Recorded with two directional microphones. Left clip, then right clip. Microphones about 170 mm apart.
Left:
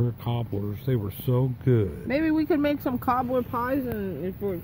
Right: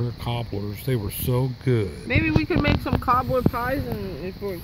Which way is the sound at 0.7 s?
20° right (ahead or behind).